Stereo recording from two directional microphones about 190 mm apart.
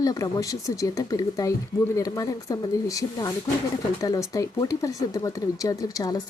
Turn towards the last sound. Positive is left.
turn(degrees=20)  # may be behind; listen again after turning